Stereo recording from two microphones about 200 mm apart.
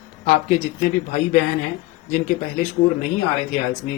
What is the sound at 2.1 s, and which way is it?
Speech, 40° left (ahead or behind).